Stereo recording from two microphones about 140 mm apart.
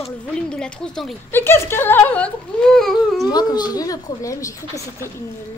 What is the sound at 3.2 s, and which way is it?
Speech, 30° left (ahead or behind).